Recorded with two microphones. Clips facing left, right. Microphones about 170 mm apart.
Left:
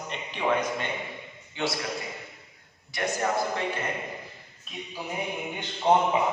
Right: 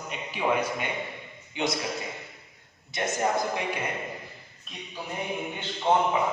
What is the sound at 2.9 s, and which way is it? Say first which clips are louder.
Speech: right 1 dB; 20° right (ahead or behind).